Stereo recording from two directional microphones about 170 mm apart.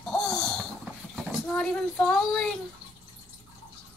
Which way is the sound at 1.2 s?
5° left (ahead or behind).